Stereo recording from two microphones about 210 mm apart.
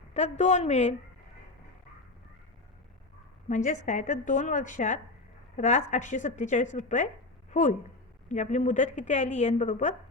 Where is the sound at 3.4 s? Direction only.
35° left (ahead or behind).